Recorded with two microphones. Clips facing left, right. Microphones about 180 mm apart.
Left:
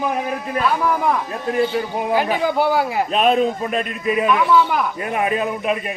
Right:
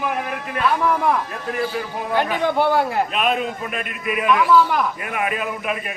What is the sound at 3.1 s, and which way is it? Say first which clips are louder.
A man's voice: left 5 dB; 35° left (ahead or behind).